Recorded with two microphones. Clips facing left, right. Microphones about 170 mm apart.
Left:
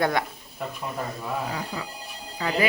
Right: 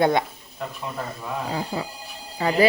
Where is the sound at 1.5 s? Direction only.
30° right (ahead or behind).